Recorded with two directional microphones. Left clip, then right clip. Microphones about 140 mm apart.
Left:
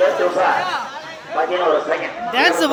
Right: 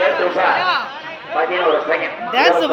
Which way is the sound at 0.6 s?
90° right.